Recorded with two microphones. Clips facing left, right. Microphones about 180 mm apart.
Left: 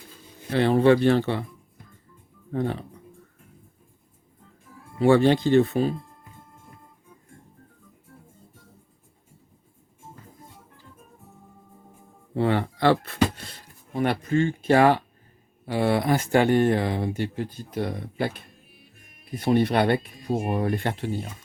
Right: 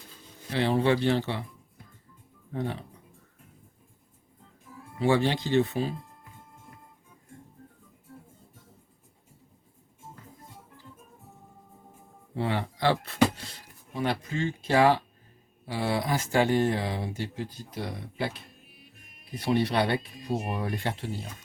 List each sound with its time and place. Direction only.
0.5 s speech: 50° left (ahead or behind)
2.5 s speech: 50° left (ahead or behind)
4.9 s speech: 50° left (ahead or behind)
12.4 s speech: 55° left (ahead or behind)